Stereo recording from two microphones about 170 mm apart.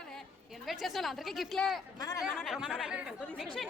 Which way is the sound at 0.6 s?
Centre (ahead or behind).